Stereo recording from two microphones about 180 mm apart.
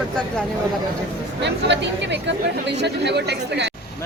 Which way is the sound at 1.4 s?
75° right (ahead or behind).